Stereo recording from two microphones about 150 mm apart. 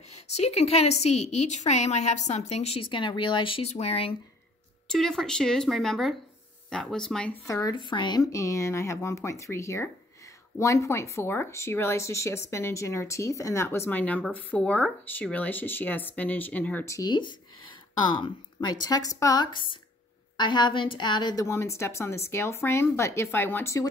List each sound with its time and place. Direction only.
0.1 s a woman's voice: 45° left (ahead or behind)
4.8 s a woman's voice: centre (ahead or behind)
7.4 s speech: 20° left (ahead or behind)
7.7 s speech: 30° left (ahead or behind); by 16.9 s 10° left (ahead or behind)
16.9 s speech: 25° left (ahead or behind)